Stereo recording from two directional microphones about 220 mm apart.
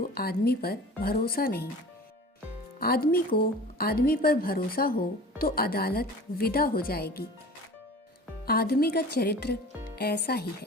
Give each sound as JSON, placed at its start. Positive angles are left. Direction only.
{"t": 0.0, "sound": "a woman's voice", "side_deg": 45}
{"t": 2.8, "sound": "a woman's voice", "side_deg": 45}
{"t": 8.4, "sound": "a woman's voice", "side_deg": 45}